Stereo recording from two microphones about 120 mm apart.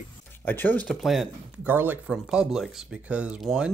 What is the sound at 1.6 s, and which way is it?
Speech, 15° right (ahead or behind).